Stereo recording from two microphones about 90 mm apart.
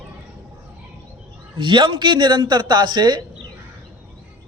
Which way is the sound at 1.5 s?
65° right (ahead or behind).